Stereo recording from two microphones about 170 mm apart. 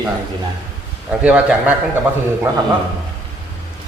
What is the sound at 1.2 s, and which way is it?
Speech, 10° right (ahead or behind).